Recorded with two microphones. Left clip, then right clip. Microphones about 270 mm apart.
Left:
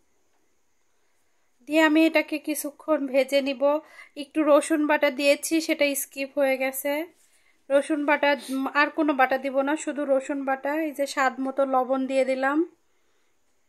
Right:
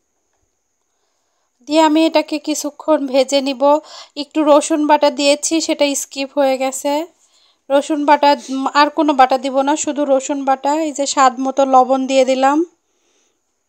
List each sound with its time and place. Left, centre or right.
1.6 s a woman's voice: centre